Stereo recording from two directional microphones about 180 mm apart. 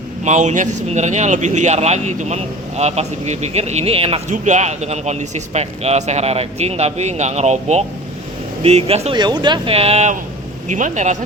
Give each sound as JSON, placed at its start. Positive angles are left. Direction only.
{"t": 0.3, "sound": "speech", "side_deg": -40}